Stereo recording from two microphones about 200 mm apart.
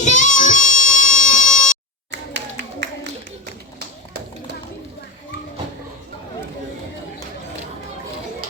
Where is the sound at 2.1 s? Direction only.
60° right (ahead or behind).